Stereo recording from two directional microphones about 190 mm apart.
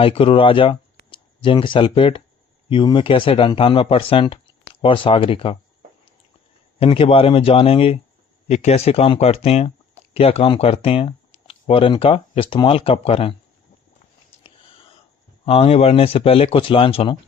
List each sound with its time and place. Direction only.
0.0 s speech: 30° left (ahead or behind)
6.7 s speech: 30° left (ahead or behind)
14.4 s whispering: 30° left (ahead or behind)
15.4 s speech: 30° left (ahead or behind)